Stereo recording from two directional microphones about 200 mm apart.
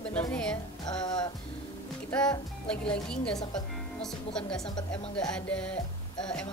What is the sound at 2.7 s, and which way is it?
Speech, 5° left (ahead or behind).